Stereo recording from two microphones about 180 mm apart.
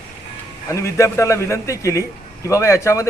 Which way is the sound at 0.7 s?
15° left (ahead or behind).